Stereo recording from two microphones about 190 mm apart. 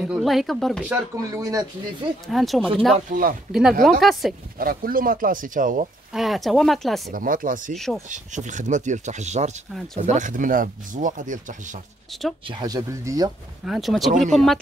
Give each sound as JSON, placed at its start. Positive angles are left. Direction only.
{"t": 0.0, "sound": "speech", "side_deg": 0}
{"t": 0.9, "sound": "speech", "side_deg": -20}
{"t": 2.2, "sound": "speech", "side_deg": 0}
{"t": 3.1, "sound": "speech", "side_deg": -45}
{"t": 4.0, "sound": "speech", "side_deg": 0}
{"t": 4.6, "sound": "speech", "side_deg": -50}
{"t": 6.1, "sound": "speech", "side_deg": 0}
{"t": 7.1, "sound": "speech", "side_deg": -45}
{"t": 7.7, "sound": "speech", "side_deg": 0}
{"t": 8.1, "sound": "speech", "side_deg": -40}
{"t": 12.1, "sound": "speech", "side_deg": 0}
{"t": 12.4, "sound": "speech", "side_deg": -20}
{"t": 13.7, "sound": "speech", "side_deg": 0}